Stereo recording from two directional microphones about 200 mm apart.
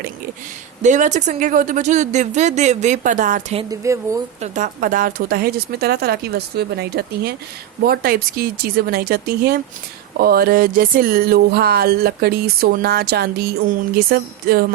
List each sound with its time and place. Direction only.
0.8 s speech: 35° right (ahead or behind)
3.6 s speech: 15° right (ahead or behind)
4.4 s a sound: 35° right (ahead or behind); by 14.6 s 50° right (ahead or behind)